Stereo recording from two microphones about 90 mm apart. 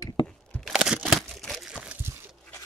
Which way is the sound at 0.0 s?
50° left (ahead or behind).